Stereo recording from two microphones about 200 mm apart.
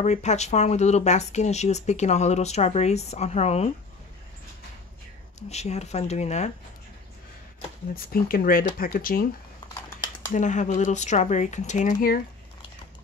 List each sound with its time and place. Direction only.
0.0 s speech: 35° left (ahead or behind)
5.5 s speech: 35° left (ahead or behind)
7.9 s speech: 45° left (ahead or behind)
9.8 s typing: 20° left (ahead or behind)
10.3 s speech: 40° left (ahead or behind)